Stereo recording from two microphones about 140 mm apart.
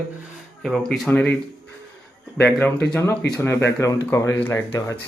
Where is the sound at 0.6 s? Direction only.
Centre (ahead or behind).